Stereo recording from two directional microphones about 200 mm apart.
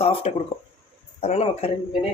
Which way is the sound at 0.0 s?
30° left (ahead or behind).